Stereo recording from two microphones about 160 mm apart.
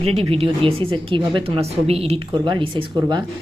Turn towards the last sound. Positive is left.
turn(degrees=-30)  # may be behind; listen again after turning